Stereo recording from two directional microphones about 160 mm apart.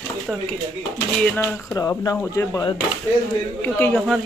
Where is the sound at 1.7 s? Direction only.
20° left (ahead or behind).